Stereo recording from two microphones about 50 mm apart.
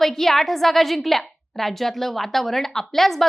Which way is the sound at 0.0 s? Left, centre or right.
Centre.